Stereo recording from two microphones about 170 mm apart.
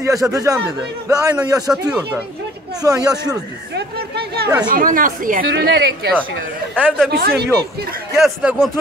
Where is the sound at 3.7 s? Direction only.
70° right (ahead or behind).